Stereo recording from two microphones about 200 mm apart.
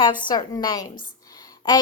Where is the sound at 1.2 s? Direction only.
20° left (ahead or behind).